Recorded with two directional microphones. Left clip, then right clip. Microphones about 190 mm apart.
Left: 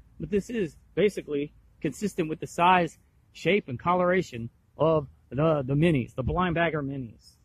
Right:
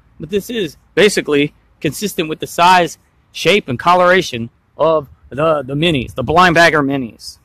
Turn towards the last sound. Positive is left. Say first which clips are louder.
# right 17 dB
turn(degrees=-20)  # may be behind; listen again after turning